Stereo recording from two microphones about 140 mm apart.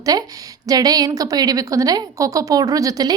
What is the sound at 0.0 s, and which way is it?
A woman's voice, 25° right (ahead or behind).